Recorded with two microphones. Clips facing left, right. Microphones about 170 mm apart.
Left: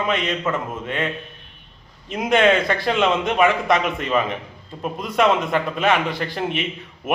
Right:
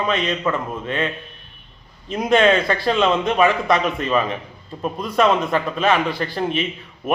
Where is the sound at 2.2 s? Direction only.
20° left (ahead or behind).